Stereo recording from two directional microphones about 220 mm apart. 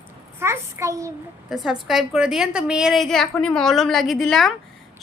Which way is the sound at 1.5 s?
Centre (ahead or behind).